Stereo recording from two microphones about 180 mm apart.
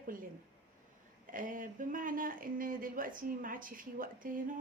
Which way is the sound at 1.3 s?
50° right (ahead or behind).